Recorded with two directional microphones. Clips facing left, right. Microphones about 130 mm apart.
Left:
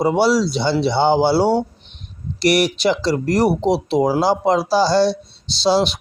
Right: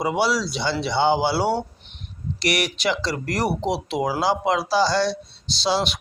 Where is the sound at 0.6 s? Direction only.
30° left (ahead or behind).